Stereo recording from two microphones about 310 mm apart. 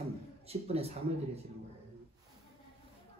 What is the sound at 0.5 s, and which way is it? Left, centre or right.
Speech, centre.